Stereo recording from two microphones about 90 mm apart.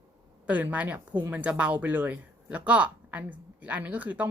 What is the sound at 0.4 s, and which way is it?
A woman's voice, 15° right (ahead or behind).